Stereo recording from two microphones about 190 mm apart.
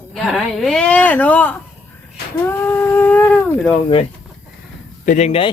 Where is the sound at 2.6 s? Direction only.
15° left (ahead or behind).